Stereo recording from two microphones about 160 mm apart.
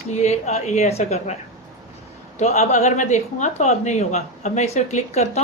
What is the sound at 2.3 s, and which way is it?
Speech, 45° left (ahead or behind).